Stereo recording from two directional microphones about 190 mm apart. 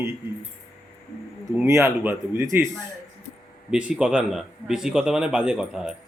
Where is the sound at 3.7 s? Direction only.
5° right (ahead or behind).